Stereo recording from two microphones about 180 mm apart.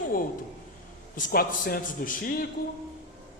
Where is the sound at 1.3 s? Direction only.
55° left (ahead or behind).